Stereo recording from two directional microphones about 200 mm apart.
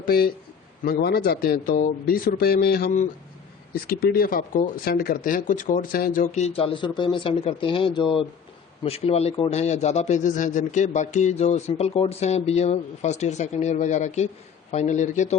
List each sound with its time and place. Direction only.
0.0 s a man's voice: 50° left (ahead or behind)